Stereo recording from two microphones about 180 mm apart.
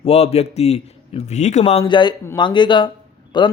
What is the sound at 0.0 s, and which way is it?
A man's voice, 35° left (ahead or behind).